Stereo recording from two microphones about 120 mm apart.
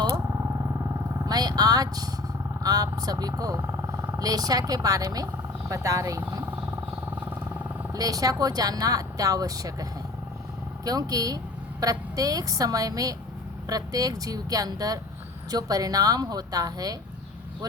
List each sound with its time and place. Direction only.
1.3 s speech: 35° right (ahead or behind)
7.9 s speech: 30° right (ahead or behind)
10.8 s speech: 30° right (ahead or behind)